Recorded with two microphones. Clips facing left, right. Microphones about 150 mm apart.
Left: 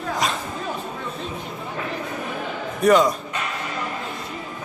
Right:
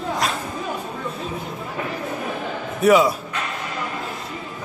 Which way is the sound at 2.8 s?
5° right (ahead or behind).